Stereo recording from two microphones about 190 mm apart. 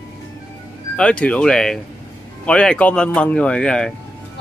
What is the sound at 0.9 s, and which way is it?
Speech, 5° left (ahead or behind).